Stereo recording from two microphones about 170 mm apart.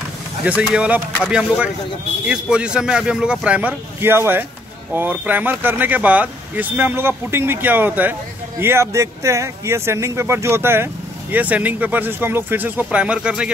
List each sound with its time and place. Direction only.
0.5 s speech: 5° right (ahead or behind)